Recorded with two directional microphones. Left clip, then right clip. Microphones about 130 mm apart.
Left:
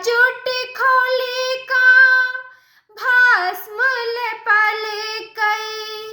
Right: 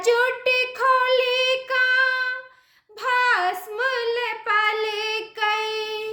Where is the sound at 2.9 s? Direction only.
15° right (ahead or behind).